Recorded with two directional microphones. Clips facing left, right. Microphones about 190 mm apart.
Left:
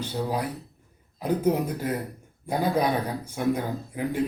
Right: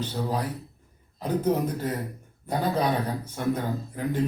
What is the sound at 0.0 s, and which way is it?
A man's voice, 10° left (ahead or behind).